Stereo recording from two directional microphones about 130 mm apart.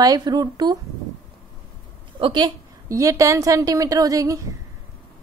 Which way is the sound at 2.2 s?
40° right (ahead or behind).